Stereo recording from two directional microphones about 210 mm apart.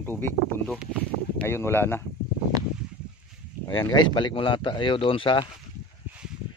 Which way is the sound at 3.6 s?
20° left (ahead or behind).